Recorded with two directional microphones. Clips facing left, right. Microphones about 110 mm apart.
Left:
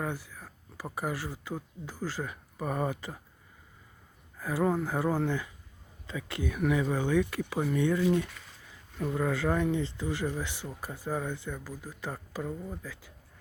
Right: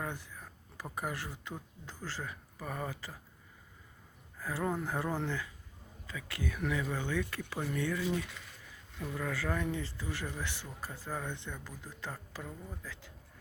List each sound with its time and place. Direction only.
0.0 s speech: 5° left (ahead or behind)
4.4 s speech: 15° left (ahead or behind)
6.1 s speech: 25° left (ahead or behind)
9.0 s speech: 20° left (ahead or behind)